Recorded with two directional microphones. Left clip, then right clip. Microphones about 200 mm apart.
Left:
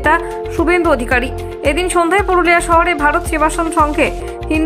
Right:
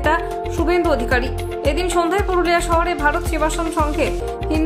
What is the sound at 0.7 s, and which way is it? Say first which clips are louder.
Speech: left 4 dB; 20° left (ahead or behind).